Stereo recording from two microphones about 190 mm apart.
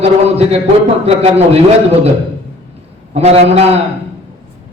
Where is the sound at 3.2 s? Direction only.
30° right (ahead or behind).